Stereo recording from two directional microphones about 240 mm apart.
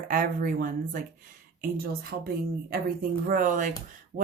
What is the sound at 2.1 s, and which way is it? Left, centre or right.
Speech, right.